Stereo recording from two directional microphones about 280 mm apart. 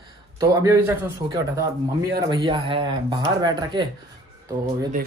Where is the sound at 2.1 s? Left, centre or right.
Centre.